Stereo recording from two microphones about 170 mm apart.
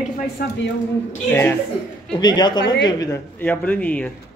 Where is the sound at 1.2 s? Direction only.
10° left (ahead or behind).